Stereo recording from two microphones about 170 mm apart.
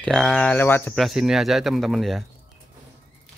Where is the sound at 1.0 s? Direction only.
Centre (ahead or behind).